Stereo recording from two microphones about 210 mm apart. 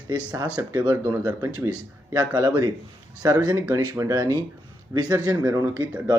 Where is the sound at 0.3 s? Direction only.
20° right (ahead or behind).